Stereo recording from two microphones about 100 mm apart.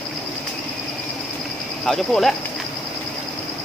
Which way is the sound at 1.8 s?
5° left (ahead or behind).